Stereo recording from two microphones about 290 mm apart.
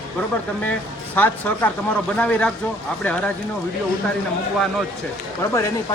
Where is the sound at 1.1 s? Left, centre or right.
Centre.